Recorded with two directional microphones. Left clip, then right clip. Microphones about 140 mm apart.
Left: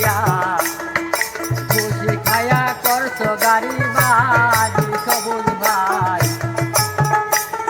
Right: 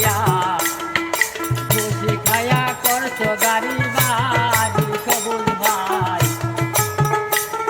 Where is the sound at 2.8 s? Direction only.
Centre (ahead or behind).